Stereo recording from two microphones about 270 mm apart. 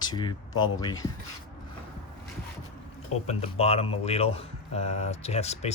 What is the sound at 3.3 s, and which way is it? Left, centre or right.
Speech, left.